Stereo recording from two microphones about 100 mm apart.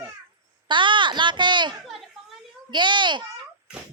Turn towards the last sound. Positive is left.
turn(degrees=-50)  # may be behind; listen again after turning